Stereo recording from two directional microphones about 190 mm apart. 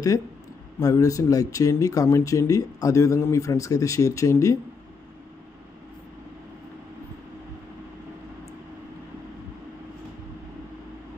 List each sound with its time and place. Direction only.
0.7 s speech: 20° left (ahead or behind)